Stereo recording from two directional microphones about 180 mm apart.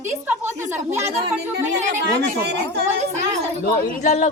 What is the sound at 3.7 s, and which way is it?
Speech, 50° left (ahead or behind).